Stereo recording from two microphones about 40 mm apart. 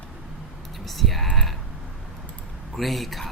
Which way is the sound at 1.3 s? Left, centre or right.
Centre.